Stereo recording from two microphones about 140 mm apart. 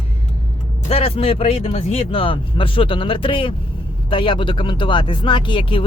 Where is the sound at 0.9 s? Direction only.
45° left (ahead or behind).